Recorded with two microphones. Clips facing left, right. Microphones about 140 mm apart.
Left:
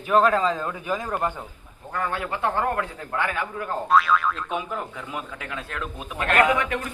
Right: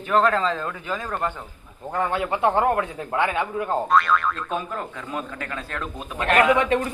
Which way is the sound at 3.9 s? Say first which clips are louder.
Left 2 dB; centre (ahead or behind).